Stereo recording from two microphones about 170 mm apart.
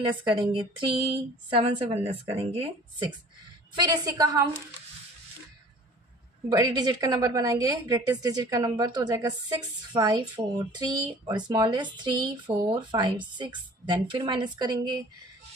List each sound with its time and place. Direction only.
0.0 s speech: 30° right (ahead or behind)
3.8 s a woman's voice: 20° right (ahead or behind)
6.5 s a woman's voice: 25° right (ahead or behind)